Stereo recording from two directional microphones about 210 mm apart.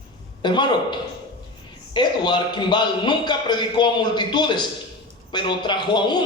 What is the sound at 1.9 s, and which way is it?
A man's voice, 20° left (ahead or behind).